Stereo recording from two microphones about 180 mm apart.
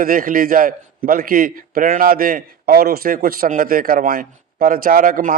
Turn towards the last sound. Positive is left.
turn(degrees=-50)  # may be behind; listen again after turning